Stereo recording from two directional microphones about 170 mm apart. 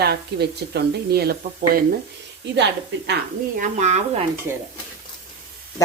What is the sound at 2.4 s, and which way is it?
Speech, 90° right.